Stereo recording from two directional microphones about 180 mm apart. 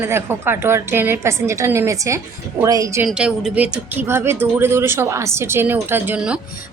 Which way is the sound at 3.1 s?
5° right (ahead or behind).